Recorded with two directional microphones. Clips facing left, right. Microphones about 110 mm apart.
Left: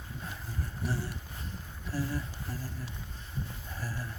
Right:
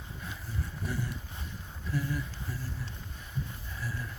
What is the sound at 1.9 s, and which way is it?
Speech, 35° left (ahead or behind).